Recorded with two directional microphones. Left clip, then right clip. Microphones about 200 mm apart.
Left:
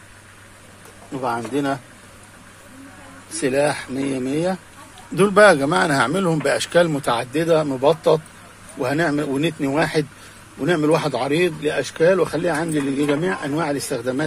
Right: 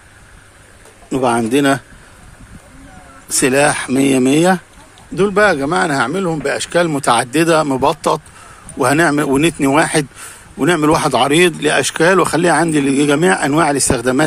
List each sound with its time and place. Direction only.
1.1 s speech: 45° right (ahead or behind)
3.3 s speech: 45° right (ahead or behind)
5.1 s a man's voice: 10° right (ahead or behind)
7.0 s speech: 30° right (ahead or behind)